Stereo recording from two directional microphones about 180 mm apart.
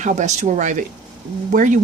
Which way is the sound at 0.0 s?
40° right (ahead or behind).